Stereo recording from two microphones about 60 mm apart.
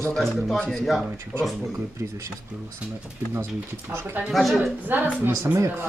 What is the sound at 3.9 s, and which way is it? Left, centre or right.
Speech, right.